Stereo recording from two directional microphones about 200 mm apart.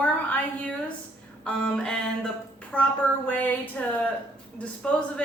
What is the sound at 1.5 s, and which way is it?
A woman's voice, 5° left (ahead or behind).